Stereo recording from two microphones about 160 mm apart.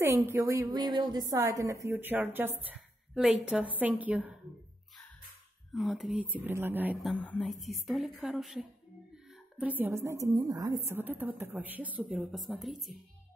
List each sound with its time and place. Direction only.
0.0 s a woman's voice: 15° right (ahead or behind)
5.7 s a woman's voice: centre (ahead or behind)
7.0 s a woman's voice: 5° left (ahead or behind); by 10.8 s 25° right (ahead or behind)
10.9 s a woman's voice: 10° right (ahead or behind)